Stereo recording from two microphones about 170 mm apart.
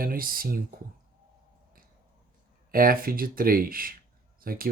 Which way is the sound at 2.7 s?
60° right (ahead or behind).